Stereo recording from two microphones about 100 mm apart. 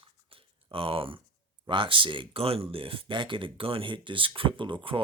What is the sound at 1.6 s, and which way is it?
Speech, 55° right (ahead or behind).